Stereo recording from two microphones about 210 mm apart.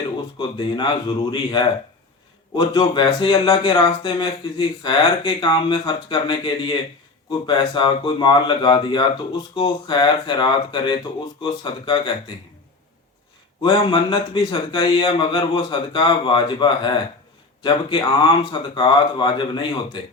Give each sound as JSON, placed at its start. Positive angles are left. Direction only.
{"t": 0.3, "sound": "speech", "side_deg": 20}
{"t": 13.6, "sound": "speech", "side_deg": 25}